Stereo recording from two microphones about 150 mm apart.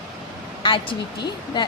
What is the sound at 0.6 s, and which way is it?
A woman's voice, 35° left (ahead or behind).